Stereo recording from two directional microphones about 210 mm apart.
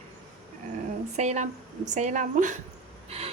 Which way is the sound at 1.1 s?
35° right (ahead or behind).